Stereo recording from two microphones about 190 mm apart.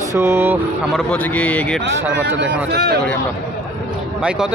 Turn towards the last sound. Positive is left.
turn(degrees=-5)  # may be behind; listen again after turning